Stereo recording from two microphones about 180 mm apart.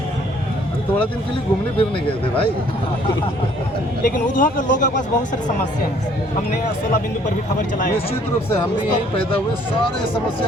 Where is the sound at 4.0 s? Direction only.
50° left (ahead or behind).